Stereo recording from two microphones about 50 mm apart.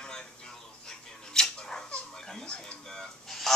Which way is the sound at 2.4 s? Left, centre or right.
Left.